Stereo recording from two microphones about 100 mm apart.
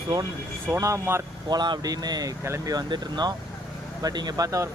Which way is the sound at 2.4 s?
30° right (ahead or behind).